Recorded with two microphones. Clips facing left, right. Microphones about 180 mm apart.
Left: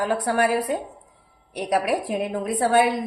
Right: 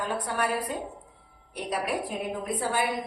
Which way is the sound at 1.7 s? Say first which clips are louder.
Left 7 dB; 80° left.